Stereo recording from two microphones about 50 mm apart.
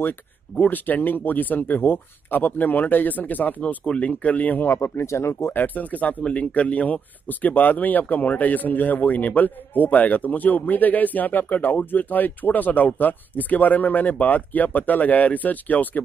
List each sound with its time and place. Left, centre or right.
0.6 s speech: left
3.8 s speech: left
4.6 s speech: left
5.5 s speech: left